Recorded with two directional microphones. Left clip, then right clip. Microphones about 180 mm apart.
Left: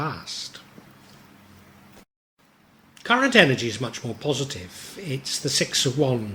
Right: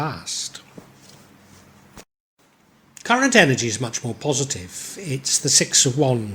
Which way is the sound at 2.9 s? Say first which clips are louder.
Right 2 dB; 40° right (ahead or behind).